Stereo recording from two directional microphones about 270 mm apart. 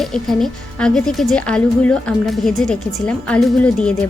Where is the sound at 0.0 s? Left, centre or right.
Centre.